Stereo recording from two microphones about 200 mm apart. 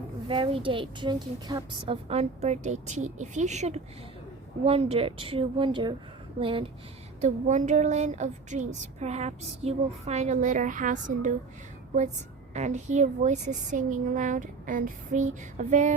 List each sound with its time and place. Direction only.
0.3 s a woman's voice: 25° right (ahead or behind)
12.5 s speech: 35° right (ahead or behind)